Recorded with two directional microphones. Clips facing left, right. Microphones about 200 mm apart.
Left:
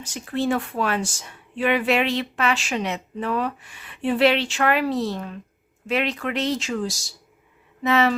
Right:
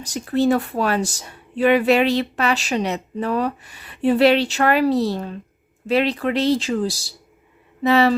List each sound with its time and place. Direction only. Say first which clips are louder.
0.0 s speech: right 6 dB; 40° right (ahead or behind)